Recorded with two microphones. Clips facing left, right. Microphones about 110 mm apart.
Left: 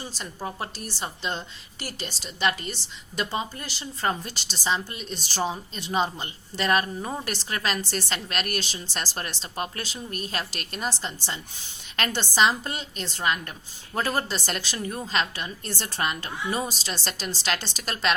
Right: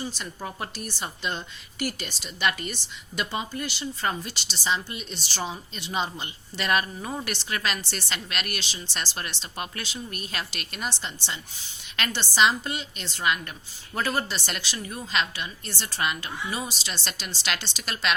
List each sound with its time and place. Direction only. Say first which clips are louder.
0.1 s a woman's voice: left 1 dB; 30° left (ahead or behind)